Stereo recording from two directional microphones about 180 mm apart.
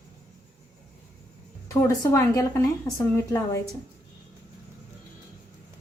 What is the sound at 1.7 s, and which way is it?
A woman's voice, 15° left (ahead or behind).